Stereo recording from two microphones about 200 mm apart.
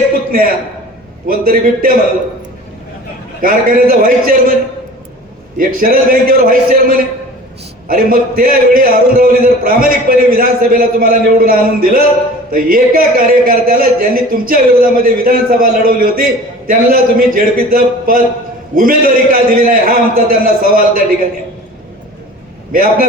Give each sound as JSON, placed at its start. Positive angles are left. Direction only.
{"t": 0.3, "sound": "a man's voice", "side_deg": -45}
{"t": 3.4, "sound": "a man's voice", "side_deg": -45}
{"t": 5.5, "sound": "a man's voice", "side_deg": -45}
{"t": 22.7, "sound": "a man's voice", "side_deg": -45}